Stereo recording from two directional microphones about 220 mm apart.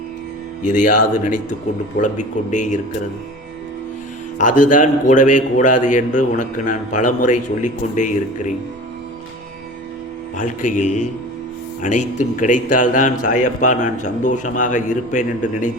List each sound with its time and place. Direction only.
0.7 s a man's voice: 35° left (ahead or behind)
2.0 s a man's voice: 35° left (ahead or behind)
4.4 s a man's voice: 35° left (ahead or behind)
10.3 s a man's voice: 35° left (ahead or behind)